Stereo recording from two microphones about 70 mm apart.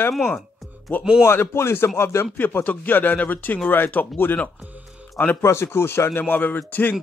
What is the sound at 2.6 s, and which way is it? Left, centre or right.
Speech, left.